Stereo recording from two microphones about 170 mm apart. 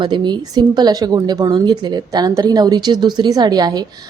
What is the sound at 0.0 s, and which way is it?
Speech, 25° right (ahead or behind).